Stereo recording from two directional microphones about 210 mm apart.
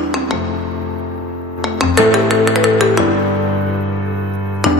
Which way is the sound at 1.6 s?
Centre (ahead or behind).